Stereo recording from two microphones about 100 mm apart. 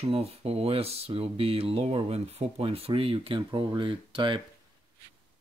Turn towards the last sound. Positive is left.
turn(degrees=-60)  # may be behind; listen again after turning